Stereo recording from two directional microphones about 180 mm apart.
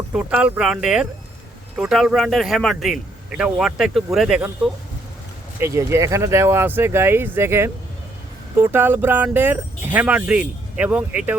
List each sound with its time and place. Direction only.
0.1 s a man's voice: 5° right (ahead or behind)